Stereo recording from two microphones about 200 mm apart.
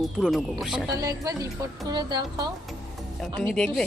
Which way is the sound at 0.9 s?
15° right (ahead or behind).